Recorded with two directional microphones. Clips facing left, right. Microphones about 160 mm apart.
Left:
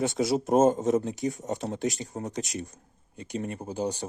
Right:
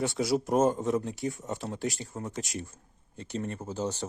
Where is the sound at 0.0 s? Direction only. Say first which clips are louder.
Left 2 dB; 20° left (ahead or behind).